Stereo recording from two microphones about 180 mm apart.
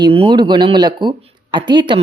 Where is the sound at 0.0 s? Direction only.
30° right (ahead or behind).